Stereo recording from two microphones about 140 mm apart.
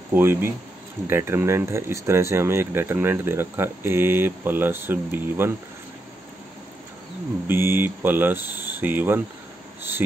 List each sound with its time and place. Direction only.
0.1 s speech: 15° right (ahead or behind)
7.4 s speech: 15° right (ahead or behind)